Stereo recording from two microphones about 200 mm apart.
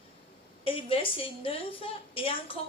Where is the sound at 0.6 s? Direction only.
25° left (ahead or behind).